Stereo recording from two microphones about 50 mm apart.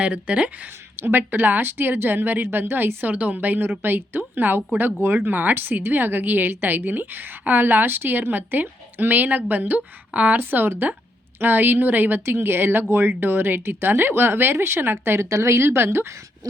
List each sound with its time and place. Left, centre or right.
0.0 s speech: right
0.9 s a woman's voice: right
10.3 s a woman's voice: right
15.3 s speech: right